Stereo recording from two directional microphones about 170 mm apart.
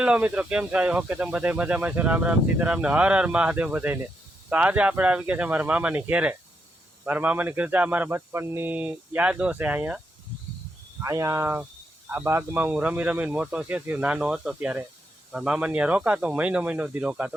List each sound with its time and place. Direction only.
0.0 s speech: 10° right (ahead or behind)
11.0 s speech: 20° right (ahead or behind)